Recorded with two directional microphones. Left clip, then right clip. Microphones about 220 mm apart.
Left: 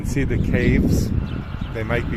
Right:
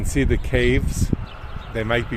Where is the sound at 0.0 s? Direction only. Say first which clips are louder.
Right 2 dB; 40° right (ahead or behind).